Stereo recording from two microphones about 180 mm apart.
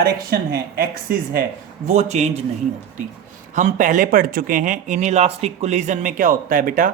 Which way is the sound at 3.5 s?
45° right (ahead or behind).